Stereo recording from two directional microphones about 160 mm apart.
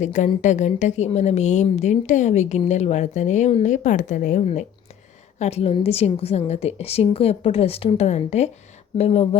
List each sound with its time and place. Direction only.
0.0 s a woman's voice: 50° left (ahead or behind)